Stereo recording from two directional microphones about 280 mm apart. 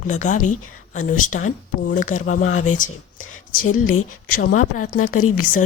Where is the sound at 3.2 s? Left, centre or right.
Left.